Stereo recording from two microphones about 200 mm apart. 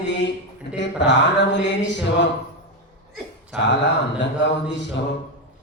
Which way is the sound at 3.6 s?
60° left (ahead or behind).